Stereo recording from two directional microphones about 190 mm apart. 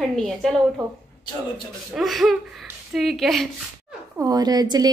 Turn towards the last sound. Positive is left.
turn(degrees=-20)  # may be behind; listen again after turning